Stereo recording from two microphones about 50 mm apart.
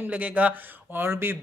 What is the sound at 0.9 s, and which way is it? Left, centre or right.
Speech, right.